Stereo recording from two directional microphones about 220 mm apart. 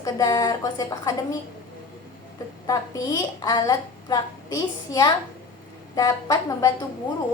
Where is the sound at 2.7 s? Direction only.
15° left (ahead or behind).